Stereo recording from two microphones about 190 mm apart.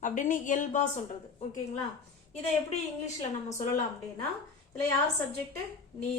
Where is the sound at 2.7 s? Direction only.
35° left (ahead or behind).